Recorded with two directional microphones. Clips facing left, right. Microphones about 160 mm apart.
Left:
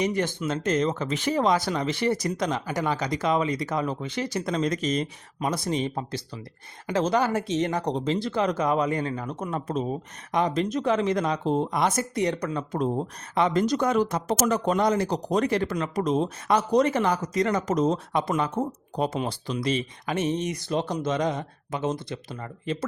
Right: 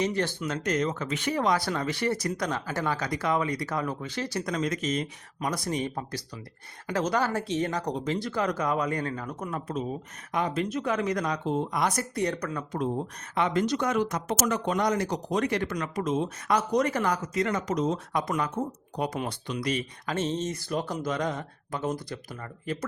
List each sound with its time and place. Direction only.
0.0 s speech: 15° left (ahead or behind)
12.7 s speech: 35° left (ahead or behind)
17.3 s speech: 35° left (ahead or behind)
20.1 s speech: 15° left (ahead or behind)